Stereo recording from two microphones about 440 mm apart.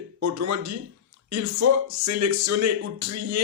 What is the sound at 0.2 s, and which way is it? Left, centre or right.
Speech, right.